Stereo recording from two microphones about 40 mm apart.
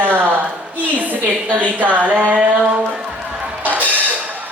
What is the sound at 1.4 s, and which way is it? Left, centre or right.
Speech, right.